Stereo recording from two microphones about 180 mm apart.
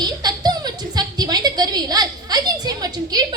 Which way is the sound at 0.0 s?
25° right (ahead or behind).